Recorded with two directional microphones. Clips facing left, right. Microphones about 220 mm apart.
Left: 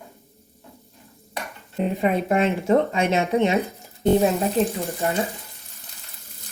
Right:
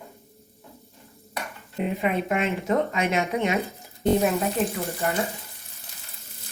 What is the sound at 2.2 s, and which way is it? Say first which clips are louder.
Speech: left 5 dB; 40° left (ahead or behind).